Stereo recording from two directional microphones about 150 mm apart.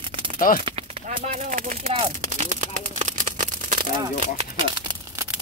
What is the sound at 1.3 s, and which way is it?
Speech, 65° right (ahead or behind).